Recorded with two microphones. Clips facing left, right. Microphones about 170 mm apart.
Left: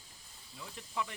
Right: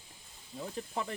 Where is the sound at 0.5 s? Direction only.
40° right (ahead or behind).